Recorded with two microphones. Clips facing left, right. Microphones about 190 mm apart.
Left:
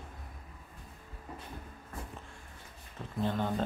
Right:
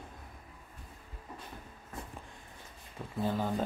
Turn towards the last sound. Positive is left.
turn(degrees=-5)  # may be behind; listen again after turning